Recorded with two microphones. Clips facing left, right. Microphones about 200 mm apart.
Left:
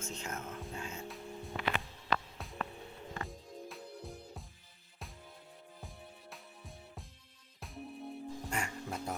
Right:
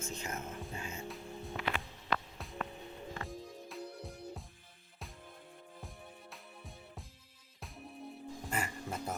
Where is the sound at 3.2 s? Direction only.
Centre (ahead or behind).